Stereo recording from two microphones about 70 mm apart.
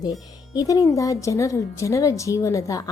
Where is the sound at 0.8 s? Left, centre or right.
Left.